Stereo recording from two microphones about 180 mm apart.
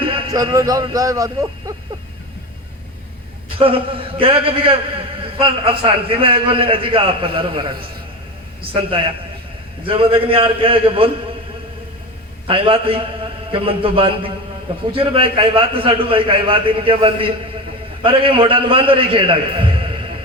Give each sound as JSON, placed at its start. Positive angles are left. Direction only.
{"t": 0.0, "sound": "a man's voice", "side_deg": -25}
{"t": 3.6, "sound": "a man's voice", "side_deg": -30}
{"t": 12.5, "sound": "a man's voice", "side_deg": -30}